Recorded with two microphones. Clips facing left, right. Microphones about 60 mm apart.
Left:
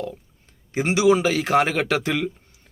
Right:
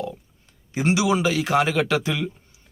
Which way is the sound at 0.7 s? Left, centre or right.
Left.